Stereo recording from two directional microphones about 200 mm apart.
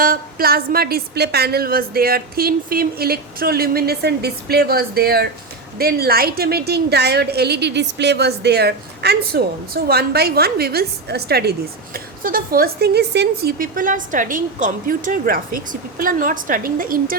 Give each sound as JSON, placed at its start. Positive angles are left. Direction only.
{"t": 0.0, "sound": "a woman's voice", "side_deg": -45}